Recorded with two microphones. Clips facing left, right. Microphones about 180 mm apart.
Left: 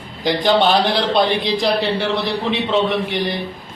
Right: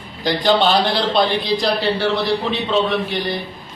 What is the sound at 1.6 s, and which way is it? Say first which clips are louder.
A man's voice: left 1 dB; 20° left (ahead or behind).